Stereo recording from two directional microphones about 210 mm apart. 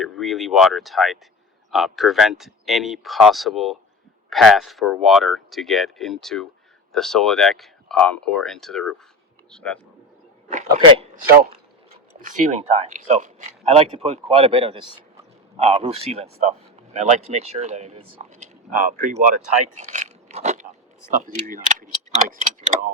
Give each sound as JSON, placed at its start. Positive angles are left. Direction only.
{"t": 0.0, "sound": "speech", "side_deg": 0}
{"t": 10.7, "sound": "a man's voice", "side_deg": -20}
{"t": 12.2, "sound": "speech", "side_deg": -35}
{"t": 19.7, "sound": "a sound", "side_deg": -35}
{"t": 21.1, "sound": "speech", "side_deg": -35}